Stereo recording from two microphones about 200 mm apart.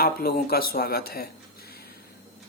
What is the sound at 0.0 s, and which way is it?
Speech, 50° left (ahead or behind).